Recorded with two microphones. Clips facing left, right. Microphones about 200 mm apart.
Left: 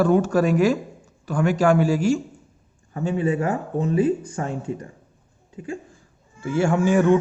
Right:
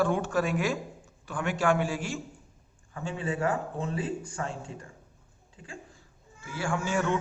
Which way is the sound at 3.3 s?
20° left (ahead or behind).